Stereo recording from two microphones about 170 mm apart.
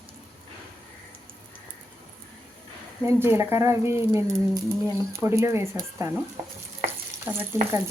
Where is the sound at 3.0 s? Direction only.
15° right (ahead or behind).